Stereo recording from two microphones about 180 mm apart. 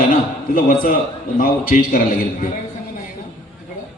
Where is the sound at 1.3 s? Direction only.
50° left (ahead or behind).